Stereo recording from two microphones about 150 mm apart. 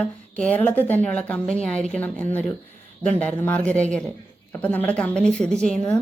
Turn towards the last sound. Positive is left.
turn(degrees=5)  # may be behind; listen again after turning